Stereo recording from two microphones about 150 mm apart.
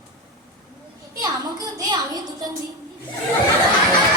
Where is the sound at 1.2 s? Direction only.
25° right (ahead or behind).